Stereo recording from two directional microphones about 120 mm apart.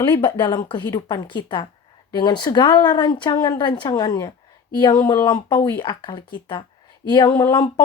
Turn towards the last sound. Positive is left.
turn(degrees=35)  # may be behind; listen again after turning